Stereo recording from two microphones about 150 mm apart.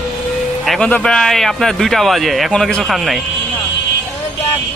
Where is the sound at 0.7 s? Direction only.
5° left (ahead or behind).